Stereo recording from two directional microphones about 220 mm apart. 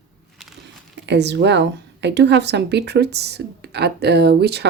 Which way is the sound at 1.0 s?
50° right (ahead or behind).